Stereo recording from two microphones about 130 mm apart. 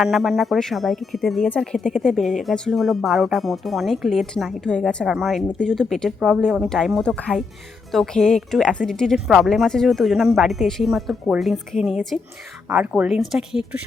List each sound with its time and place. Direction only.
0.0 s a woman's voice: centre (ahead or behind)